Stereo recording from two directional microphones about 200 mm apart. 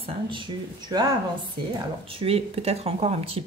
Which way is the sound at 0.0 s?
25° right (ahead or behind).